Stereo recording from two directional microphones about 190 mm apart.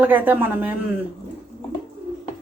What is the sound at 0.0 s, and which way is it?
Speech, 10° right (ahead or behind).